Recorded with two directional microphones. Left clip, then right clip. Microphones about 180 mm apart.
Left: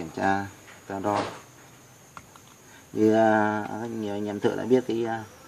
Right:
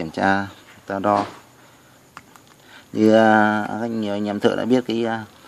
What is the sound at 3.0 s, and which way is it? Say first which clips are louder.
A man's voice: right 6 dB; 55° right (ahead or behind).